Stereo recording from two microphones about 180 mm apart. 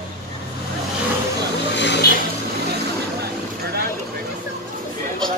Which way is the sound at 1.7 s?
75° left (ahead or behind).